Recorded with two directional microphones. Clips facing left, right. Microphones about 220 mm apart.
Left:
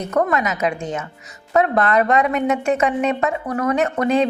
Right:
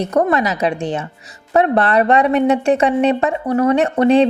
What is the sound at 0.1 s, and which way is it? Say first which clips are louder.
A woman's voice: right 1 dB; 35° right (ahead or behind).